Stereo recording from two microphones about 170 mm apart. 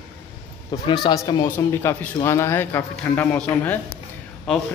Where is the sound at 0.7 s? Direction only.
25° left (ahead or behind).